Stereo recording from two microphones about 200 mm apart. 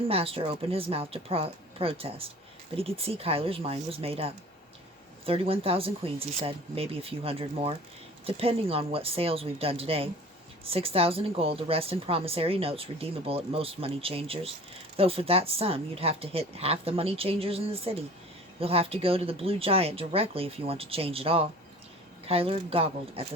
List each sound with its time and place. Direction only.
0.1 s a woman's voice: 30° right (ahead or behind)